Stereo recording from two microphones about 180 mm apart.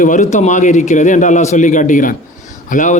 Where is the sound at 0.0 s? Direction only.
45° left (ahead or behind).